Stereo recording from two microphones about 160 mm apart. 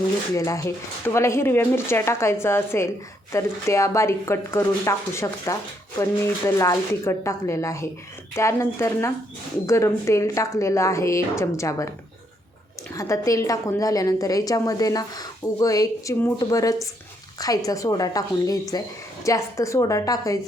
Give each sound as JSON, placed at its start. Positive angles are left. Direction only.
{"t": 0.3, "sound": "a woman's voice", "side_deg": 20}
{"t": 12.9, "sound": "a woman's voice", "side_deg": 20}